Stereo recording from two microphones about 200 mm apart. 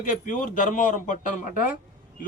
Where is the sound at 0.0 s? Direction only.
40° left (ahead or behind).